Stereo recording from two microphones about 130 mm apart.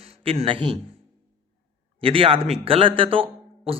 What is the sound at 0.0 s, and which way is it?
Speech, 50° right (ahead or behind).